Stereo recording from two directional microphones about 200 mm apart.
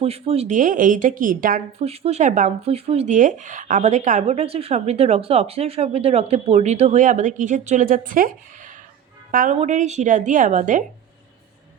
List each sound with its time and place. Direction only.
0.0 s speech: 30° right (ahead or behind)
1.8 s speech: 30° right (ahead or behind)